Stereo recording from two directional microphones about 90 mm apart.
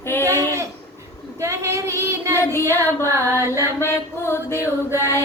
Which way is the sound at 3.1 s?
30° right (ahead or behind).